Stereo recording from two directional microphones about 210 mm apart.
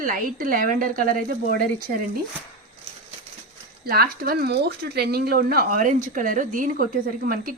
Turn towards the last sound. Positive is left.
turn(degrees=-45)  # may be behind; listen again after turning